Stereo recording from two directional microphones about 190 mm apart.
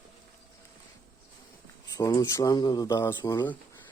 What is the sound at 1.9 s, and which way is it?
Speech, 20° left (ahead or behind).